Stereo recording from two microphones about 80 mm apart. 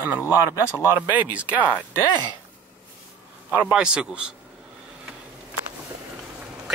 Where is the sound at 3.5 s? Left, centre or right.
Centre.